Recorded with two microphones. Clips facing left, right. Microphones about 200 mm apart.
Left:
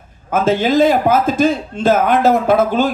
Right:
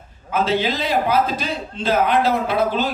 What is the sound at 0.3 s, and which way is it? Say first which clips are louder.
A man's voice: left 6 dB; 50° left (ahead or behind).